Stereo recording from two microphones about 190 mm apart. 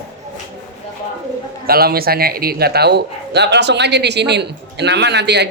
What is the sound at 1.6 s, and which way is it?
A man's voice, 55° right (ahead or behind).